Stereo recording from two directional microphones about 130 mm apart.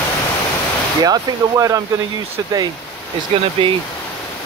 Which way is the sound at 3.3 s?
45° right (ahead or behind).